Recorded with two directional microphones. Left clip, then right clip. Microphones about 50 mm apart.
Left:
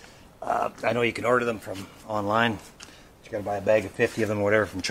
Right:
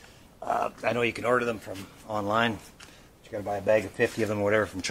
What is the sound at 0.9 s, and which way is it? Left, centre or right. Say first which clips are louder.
Speech: left 2 dB; left.